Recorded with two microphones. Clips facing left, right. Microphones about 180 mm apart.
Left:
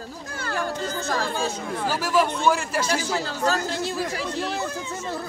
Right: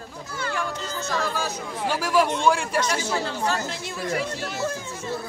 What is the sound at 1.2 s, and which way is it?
Speech, 30° left (ahead or behind).